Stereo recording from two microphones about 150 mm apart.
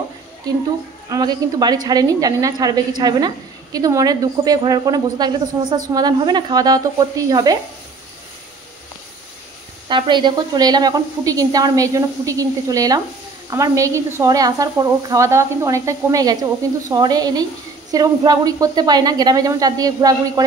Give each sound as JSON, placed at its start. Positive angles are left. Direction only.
{"t": 1.0, "sound": "a woman's voice", "side_deg": -25}
{"t": 9.8, "sound": "a woman's voice", "side_deg": -30}